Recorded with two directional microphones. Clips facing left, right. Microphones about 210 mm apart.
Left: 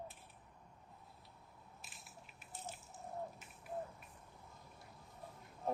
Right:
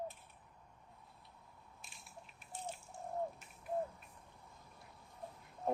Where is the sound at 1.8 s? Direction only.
Centre (ahead or behind).